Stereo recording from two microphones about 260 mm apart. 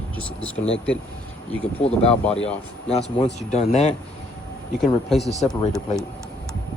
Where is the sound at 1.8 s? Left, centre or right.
Left.